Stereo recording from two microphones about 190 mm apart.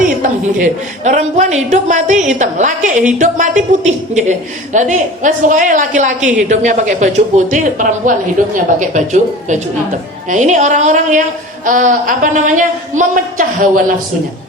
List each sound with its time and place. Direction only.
0.2 s a woman's voice: 40° right (ahead or behind)